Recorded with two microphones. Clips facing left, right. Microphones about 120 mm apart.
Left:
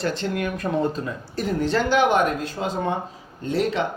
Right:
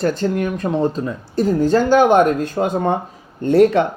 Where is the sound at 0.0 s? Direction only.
40° right (ahead or behind).